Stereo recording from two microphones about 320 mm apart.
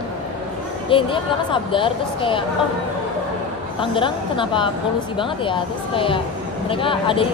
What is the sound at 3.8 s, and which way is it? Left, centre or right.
A woman's voice, centre.